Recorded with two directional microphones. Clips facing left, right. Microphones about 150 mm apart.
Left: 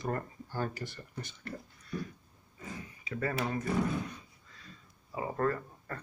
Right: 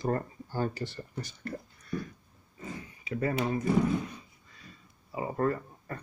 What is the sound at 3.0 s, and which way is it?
Speech, 25° right (ahead or behind).